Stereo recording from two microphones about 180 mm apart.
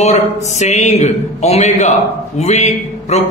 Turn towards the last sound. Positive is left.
turn(degrees=40)  # may be behind; listen again after turning